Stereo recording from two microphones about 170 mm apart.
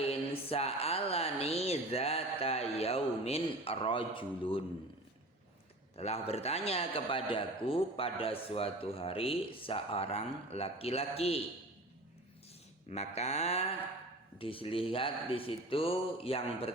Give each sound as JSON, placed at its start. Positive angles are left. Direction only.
{"t": 0.0, "sound": "speech", "side_deg": 35}
{"t": 6.0, "sound": "a man's voice", "side_deg": 35}
{"t": 12.9, "sound": "a man's voice", "side_deg": 40}